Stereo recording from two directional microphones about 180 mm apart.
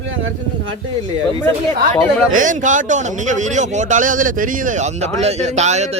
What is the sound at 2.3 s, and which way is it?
A man's voice, 45° right (ahead or behind).